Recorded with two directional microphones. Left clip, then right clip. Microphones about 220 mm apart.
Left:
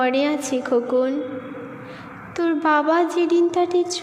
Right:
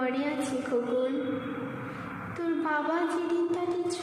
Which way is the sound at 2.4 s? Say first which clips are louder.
Left 11 dB; 40° left (ahead or behind).